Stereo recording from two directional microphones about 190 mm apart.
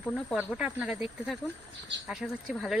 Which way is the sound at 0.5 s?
5° right (ahead or behind).